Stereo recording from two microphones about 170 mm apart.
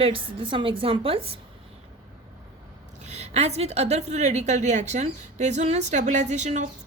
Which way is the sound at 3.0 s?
40° right (ahead or behind).